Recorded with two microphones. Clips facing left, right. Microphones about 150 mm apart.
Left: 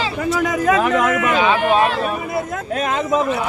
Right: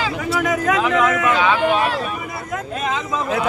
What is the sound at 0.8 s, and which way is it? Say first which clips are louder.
Speech: left 1 dB; 50° left (ahead or behind).